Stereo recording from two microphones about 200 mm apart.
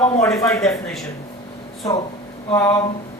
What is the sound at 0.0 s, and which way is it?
Speech, 15° left (ahead or behind).